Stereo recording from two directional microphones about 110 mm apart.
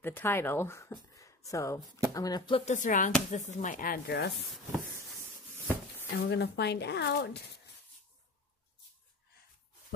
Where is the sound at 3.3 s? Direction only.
90° left.